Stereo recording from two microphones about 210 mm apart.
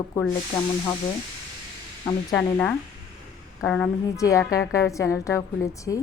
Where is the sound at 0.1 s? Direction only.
15° left (ahead or behind).